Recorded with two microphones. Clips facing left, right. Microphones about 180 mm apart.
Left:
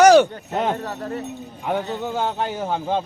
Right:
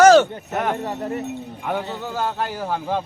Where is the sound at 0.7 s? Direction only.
10° right (ahead or behind).